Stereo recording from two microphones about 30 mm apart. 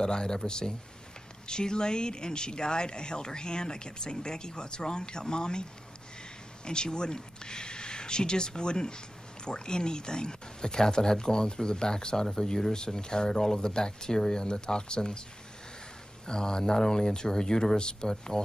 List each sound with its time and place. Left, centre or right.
0.0 s speech: left
16.3 s speech: left